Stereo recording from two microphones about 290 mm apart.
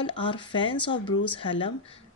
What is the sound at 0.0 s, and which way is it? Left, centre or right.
A woman's voice, centre.